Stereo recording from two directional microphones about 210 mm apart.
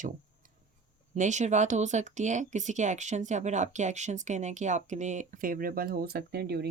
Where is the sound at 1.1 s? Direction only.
35° right (ahead or behind).